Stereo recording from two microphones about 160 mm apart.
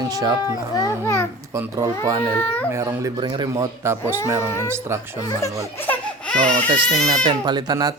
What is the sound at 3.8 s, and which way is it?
Speech, 15° right (ahead or behind).